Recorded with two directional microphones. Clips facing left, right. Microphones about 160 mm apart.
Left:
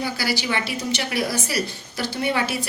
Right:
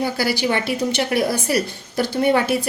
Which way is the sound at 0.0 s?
55° right (ahead or behind).